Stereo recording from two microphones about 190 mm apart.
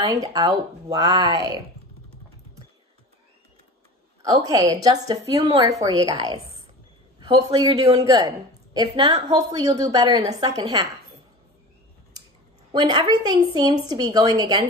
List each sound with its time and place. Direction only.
0.0 s a woman's voice: 20° right (ahead or behind)
4.2 s a woman's voice: 20° right (ahead or behind)
12.7 s a woman's voice: 20° right (ahead or behind)